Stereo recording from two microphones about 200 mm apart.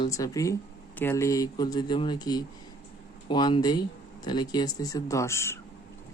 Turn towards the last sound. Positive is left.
turn(degrees=15)  # may be behind; listen again after turning